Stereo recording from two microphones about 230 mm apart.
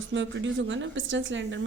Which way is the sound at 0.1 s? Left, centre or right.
Right.